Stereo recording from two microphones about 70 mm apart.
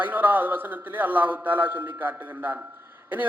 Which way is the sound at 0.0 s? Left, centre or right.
Right.